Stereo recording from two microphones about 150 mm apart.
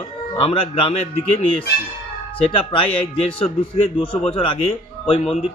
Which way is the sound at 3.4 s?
35° left (ahead or behind).